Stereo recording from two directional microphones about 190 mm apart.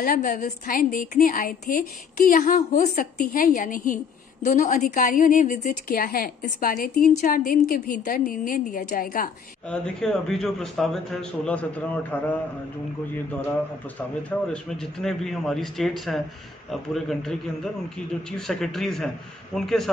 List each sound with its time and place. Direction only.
0.0 s a woman's voice: 50° left (ahead or behind)
9.7 s a man's voice: 5° left (ahead or behind)
14.5 s a man's voice: 5° left (ahead or behind)
18.5 s a man's voice: centre (ahead or behind)